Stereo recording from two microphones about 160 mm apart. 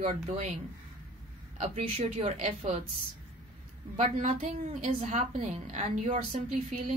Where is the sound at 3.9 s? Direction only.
50° right (ahead or behind).